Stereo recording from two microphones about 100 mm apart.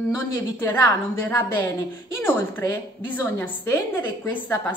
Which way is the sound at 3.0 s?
20° left (ahead or behind).